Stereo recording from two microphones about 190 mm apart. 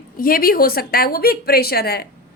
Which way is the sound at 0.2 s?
50° left (ahead or behind).